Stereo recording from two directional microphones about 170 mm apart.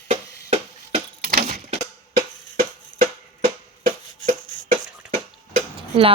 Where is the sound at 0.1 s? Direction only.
40° right (ahead or behind).